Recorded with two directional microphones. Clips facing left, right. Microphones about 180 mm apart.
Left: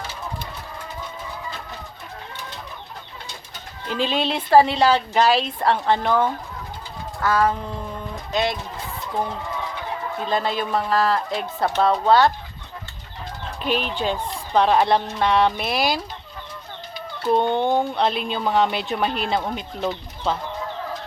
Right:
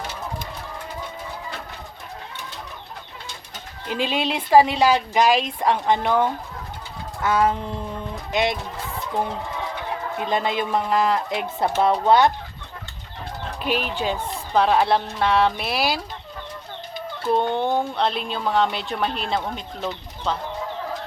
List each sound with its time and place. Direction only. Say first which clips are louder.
3.9 s a woman's voice: left 1 dB; 10° right (ahead or behind)
7.2 s music: even; 20° right (ahead or behind)
8.3 s speech: right 1 dB; 20° right (ahead or behind)
10.2 s a woman's voice: even; 15° right (ahead or behind)
13.6 s a woman's voice: left 1 dB; 5° right (ahead or behind)
17.5 s a woman's voice: left 2 dB; centre (ahead or behind)